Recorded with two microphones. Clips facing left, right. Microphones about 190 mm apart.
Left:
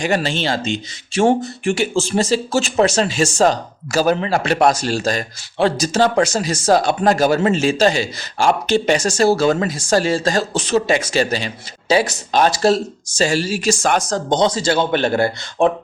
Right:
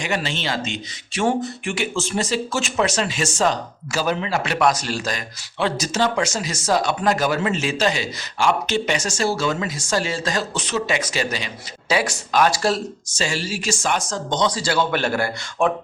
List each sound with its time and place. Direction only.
0.0 s speech: 35° left (ahead or behind)